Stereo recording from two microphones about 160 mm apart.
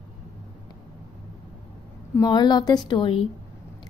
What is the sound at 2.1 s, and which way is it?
A woman's voice, 25° left (ahead or behind).